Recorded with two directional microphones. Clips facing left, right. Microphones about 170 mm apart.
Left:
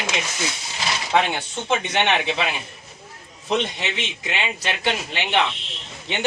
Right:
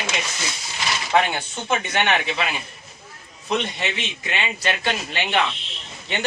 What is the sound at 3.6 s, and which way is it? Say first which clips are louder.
Speech: left 1 dB; 20° left (ahead or behind).